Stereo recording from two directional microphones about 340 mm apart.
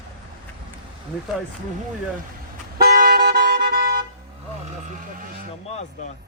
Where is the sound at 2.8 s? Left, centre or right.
Right.